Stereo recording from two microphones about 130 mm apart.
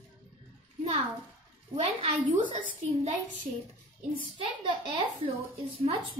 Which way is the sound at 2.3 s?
80° right.